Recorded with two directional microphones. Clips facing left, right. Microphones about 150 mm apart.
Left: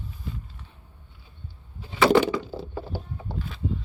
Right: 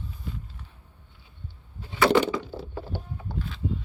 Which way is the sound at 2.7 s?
15° left (ahead or behind).